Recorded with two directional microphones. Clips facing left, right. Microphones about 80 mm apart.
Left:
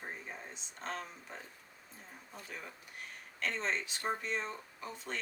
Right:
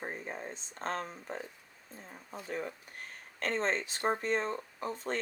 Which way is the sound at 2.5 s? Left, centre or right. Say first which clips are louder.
Right 11 dB; right.